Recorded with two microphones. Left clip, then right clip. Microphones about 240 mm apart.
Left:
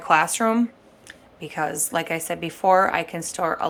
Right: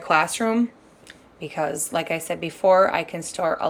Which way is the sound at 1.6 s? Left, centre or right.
Centre.